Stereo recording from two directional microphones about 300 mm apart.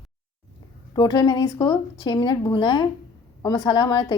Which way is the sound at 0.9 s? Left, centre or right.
Centre.